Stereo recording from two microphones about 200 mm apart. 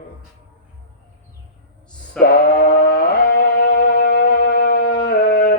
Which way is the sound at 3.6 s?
55° left (ahead or behind).